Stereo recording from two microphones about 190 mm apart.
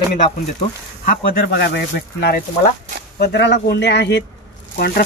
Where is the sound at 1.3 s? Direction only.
55° left (ahead or behind).